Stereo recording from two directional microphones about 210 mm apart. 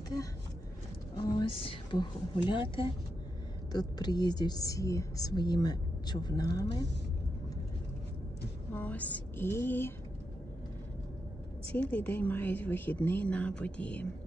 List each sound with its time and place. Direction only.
1.1 s a woman's voice: 20° left (ahead or behind)
8.7 s speech: 5° left (ahead or behind)
11.7 s speech: 5° left (ahead or behind)